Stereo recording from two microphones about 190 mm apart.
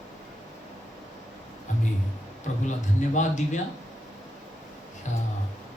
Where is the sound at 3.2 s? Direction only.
40° left (ahead or behind).